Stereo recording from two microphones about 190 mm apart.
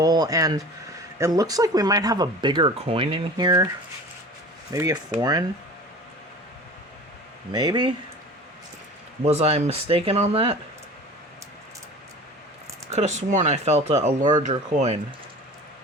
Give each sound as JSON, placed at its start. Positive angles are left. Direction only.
{"t": 0.0, "sound": "speech", "side_deg": -20}
{"t": 4.7, "sound": "speech", "side_deg": -20}
{"t": 7.5, "sound": "speech", "side_deg": -25}
{"t": 9.2, "sound": "speech", "side_deg": -35}
{"t": 12.9, "sound": "speech", "side_deg": -35}